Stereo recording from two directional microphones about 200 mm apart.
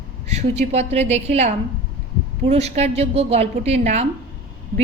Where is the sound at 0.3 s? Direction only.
35° right (ahead or behind).